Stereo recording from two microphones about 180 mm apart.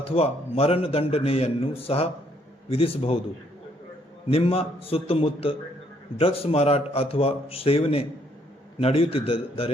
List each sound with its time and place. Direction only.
0.0 s a man's voice: 35° left (ahead or behind)
4.3 s a man's voice: 35° left (ahead or behind)